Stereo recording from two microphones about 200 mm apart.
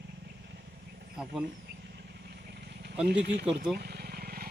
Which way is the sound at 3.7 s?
50° right (ahead or behind).